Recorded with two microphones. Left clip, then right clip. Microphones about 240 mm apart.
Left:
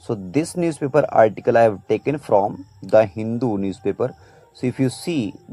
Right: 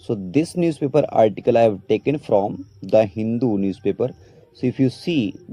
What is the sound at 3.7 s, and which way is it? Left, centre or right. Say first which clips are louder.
Speech: right 1 dB; centre.